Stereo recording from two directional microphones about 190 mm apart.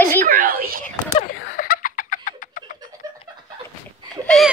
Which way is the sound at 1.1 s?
50° left (ahead or behind).